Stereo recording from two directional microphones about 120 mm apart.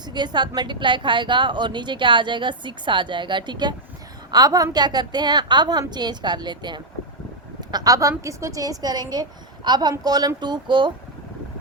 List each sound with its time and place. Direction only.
0.0 s a woman's voice: 40° right (ahead or behind)